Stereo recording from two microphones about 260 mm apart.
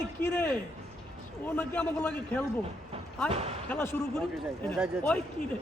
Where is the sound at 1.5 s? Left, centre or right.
Centre.